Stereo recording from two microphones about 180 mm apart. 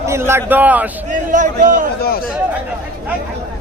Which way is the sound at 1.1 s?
45° right (ahead or behind).